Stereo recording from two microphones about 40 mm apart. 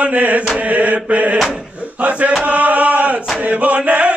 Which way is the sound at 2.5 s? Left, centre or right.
Right.